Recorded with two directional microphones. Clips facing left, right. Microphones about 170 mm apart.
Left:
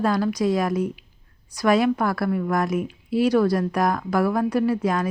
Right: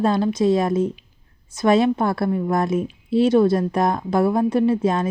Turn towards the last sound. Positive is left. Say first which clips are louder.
# right 3 dB
turn(degrees=-25)  # may be behind; listen again after turning